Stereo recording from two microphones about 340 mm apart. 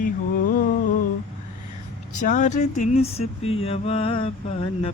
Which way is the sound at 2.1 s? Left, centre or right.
Left.